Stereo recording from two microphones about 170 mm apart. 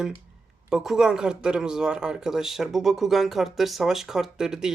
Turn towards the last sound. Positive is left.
turn(degrees=-5)  # may be behind; listen again after turning